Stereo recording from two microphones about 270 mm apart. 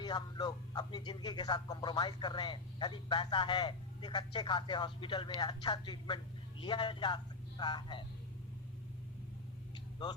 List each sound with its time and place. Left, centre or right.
0.0 s a man's voice: centre